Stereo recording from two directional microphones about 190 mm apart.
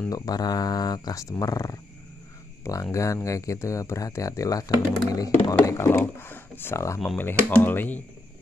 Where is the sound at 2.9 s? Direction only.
15° left (ahead or behind).